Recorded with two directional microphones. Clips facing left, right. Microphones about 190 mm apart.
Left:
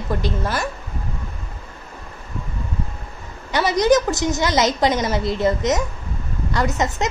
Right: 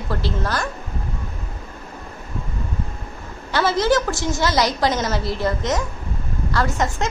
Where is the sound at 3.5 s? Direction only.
15° left (ahead or behind).